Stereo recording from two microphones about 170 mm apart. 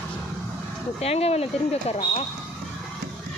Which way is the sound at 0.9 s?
35° left (ahead or behind).